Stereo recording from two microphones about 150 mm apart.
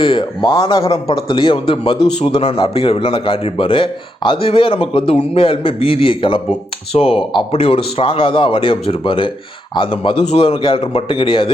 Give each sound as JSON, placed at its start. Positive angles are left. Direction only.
{"t": 0.0, "sound": "speech", "side_deg": 35}